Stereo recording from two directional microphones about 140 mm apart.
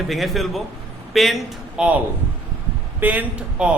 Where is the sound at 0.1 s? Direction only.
Centre (ahead or behind).